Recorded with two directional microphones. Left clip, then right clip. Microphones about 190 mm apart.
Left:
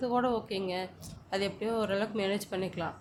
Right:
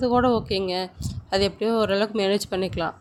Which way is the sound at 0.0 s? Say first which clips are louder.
Right 9 dB; 45° right (ahead or behind).